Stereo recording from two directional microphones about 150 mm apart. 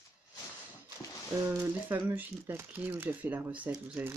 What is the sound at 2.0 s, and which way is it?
Speech, 15° right (ahead or behind).